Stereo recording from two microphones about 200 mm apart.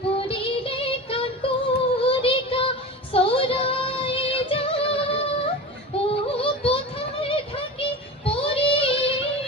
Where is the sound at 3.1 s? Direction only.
25° left (ahead or behind).